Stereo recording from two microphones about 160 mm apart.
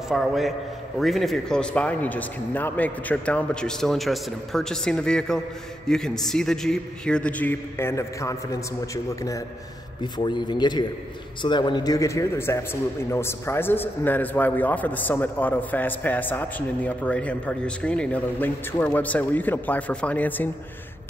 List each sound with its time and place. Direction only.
0.1 s a man's voice: centre (ahead or behind)